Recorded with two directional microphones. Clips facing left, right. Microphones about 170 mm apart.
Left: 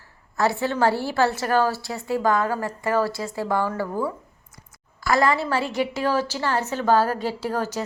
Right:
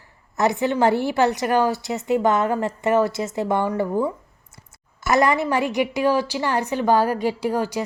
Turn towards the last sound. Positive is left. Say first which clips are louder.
# right 3 dB
turn(degrees=-10)  # may be behind; listen again after turning